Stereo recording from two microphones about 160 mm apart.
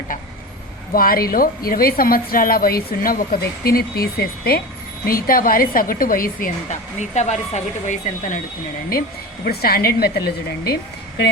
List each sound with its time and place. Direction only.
0.9 s a woman's voice: 65° left (ahead or behind)
5.0 s a woman's voice: 60° left (ahead or behind)
8.9 s a woman's voice: 70° left (ahead or behind)